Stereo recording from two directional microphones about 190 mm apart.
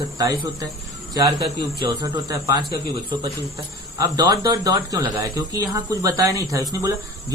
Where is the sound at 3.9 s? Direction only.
20° right (ahead or behind).